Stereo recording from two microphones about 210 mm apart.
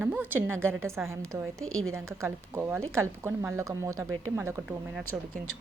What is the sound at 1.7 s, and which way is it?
Speech, 80° right.